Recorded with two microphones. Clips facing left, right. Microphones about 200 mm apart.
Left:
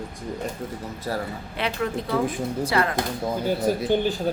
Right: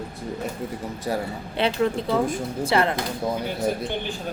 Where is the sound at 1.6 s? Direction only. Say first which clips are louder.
Right 4 dB; 30° right (ahead or behind).